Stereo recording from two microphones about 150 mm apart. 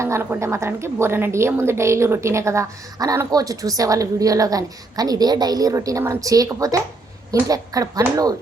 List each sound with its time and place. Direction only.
0.0 s a woman's voice: 15° right (ahead or behind)